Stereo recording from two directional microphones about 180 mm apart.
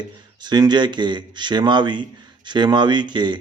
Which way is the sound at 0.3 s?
25° right (ahead or behind).